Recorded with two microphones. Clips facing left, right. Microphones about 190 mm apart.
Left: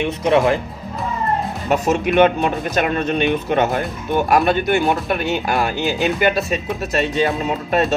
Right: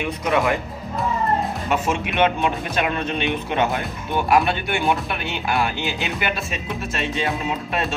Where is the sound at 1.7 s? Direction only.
40° left (ahead or behind).